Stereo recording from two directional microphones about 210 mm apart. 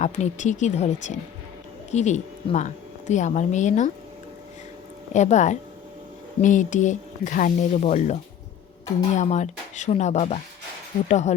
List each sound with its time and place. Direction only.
0.0 s speech: 35° left (ahead or behind)
5.1 s speech: 35° left (ahead or behind)